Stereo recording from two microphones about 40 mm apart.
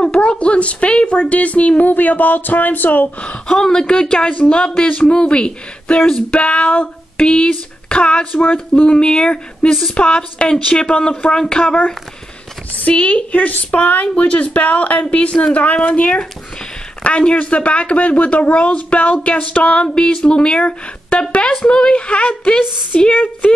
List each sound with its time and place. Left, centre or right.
0.0 s speech: left
1.3 s speech: left
1.9 s speech: left
3.4 s speech: centre; by 6.9 s left
7.2 s speech: left
12.9 s speech: left
19.9 s speech: left